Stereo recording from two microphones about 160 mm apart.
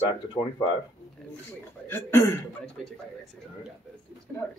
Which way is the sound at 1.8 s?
15° left (ahead or behind).